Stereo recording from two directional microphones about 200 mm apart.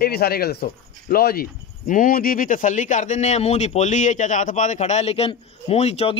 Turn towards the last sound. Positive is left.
turn(degrees=30)  # may be behind; listen again after turning